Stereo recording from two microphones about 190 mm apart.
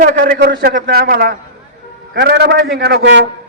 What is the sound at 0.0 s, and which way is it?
A man's voice, 50° right (ahead or behind).